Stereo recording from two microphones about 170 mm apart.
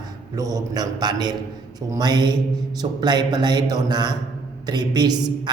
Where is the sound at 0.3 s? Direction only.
20° right (ahead or behind).